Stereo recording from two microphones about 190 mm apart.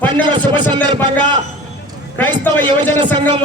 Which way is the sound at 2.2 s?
10° left (ahead or behind).